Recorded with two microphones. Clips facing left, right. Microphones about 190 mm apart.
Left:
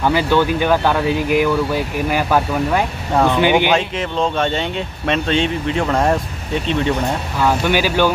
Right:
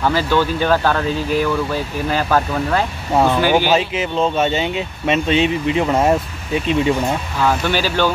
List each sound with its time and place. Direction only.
0.0 s speech: 15° left (ahead or behind)
3.7 s speech: 5° right (ahead or behind)
7.4 s speech: 10° left (ahead or behind)